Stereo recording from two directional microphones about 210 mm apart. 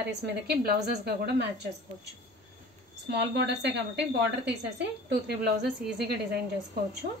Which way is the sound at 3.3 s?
55° right (ahead or behind).